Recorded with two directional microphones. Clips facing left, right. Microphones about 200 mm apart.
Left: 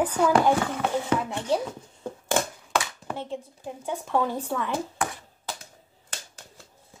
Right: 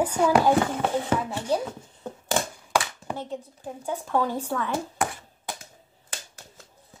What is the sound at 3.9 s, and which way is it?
Speech, centre (ahead or behind).